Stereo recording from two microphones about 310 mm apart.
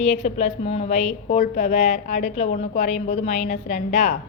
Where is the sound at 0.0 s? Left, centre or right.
Left.